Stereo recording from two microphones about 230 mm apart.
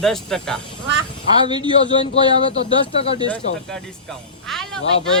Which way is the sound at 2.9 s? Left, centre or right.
Left.